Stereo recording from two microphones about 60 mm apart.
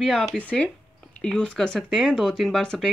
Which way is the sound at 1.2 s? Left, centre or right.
Centre.